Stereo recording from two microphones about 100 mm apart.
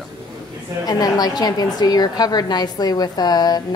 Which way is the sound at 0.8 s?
40° left (ahead or behind).